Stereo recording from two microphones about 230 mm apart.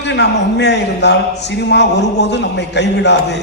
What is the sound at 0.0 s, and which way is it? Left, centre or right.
A man's voice, left.